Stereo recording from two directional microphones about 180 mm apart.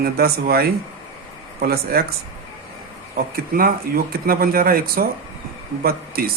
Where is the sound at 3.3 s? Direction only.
50° right (ahead or behind).